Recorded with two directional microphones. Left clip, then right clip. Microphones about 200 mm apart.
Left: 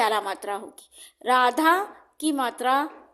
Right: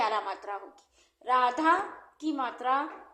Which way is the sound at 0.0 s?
50° left (ahead or behind).